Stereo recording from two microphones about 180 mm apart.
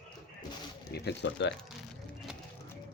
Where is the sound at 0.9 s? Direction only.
70° left (ahead or behind).